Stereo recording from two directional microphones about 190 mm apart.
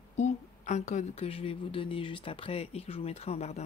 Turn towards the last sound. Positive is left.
turn(degrees=35)  # may be behind; listen again after turning